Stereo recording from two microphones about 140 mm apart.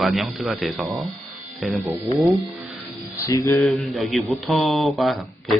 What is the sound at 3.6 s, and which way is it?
A man's voice, centre (ahead or behind).